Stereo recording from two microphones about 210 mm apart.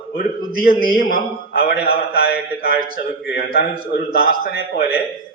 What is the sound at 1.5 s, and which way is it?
A man's voice, 45° left (ahead or behind).